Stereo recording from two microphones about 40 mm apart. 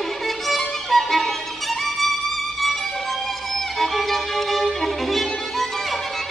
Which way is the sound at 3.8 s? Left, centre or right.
Centre.